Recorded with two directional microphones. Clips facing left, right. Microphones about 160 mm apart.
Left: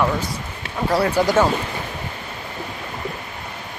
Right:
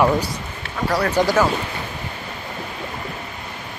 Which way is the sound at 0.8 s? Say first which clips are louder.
Left 2 dB; 25° left (ahead or behind).